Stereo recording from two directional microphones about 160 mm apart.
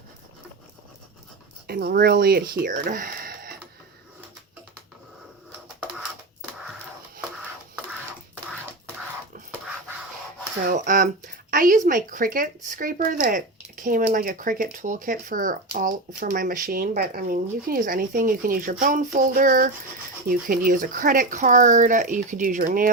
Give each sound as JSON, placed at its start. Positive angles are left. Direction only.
{"t": 1.6, "sound": "speech", "side_deg": -75}
{"t": 10.7, "sound": "speech", "side_deg": -60}